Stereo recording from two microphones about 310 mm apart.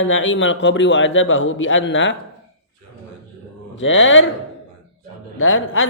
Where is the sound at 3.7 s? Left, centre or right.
Left.